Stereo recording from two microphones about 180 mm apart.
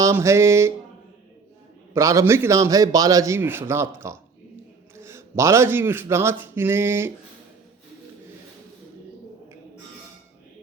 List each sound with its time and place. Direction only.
0.0 s a man's voice: 15° right (ahead or behind)
1.9 s a man's voice: 15° right (ahead or behind)